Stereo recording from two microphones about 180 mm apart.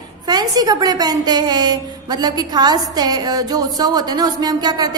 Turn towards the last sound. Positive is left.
turn(degrees=-20)  # may be behind; listen again after turning